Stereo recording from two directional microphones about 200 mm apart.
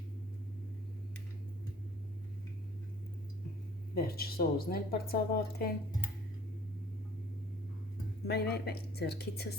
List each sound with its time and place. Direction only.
3.9 s speech: 50° left (ahead or behind)
8.3 s speech: 55° left (ahead or behind)